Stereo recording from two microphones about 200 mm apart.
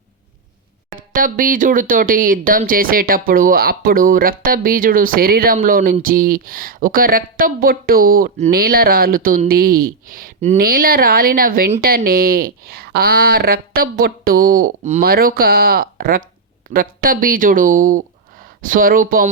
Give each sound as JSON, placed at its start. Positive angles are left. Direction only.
{"t": 0.9, "sound": "speech", "side_deg": -45}